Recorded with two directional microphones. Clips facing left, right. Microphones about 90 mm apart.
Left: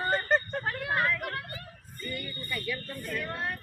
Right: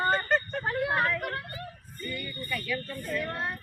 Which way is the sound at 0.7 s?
20° right (ahead or behind).